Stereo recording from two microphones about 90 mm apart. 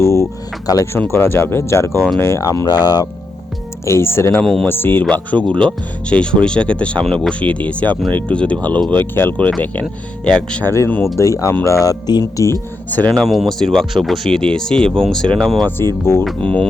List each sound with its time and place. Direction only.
0.0 s a sound: 30° left (ahead or behind)
0.9 s speech: 30° left (ahead or behind)
2.4 s speech: 45° left (ahead or behind)
3.8 s speech: 30° left (ahead or behind)
4.4 s speech: 10° left (ahead or behind)
4.7 s speech: 25° left (ahead or behind)
10.2 s speech: 10° left (ahead or behind)
10.7 s speech: 25° left (ahead or behind)
11.2 s speech: 35° left (ahead or behind)
12.2 s speech: 30° left (ahead or behind)
12.9 s speech: 15° left (ahead or behind)
13.2 s speech: centre (ahead or behind)